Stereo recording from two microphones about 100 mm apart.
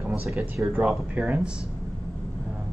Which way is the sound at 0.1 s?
5° right (ahead or behind).